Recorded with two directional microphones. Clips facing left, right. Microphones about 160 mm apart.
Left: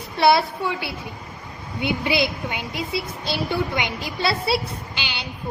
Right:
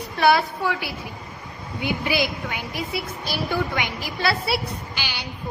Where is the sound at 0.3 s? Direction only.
25° left (ahead or behind).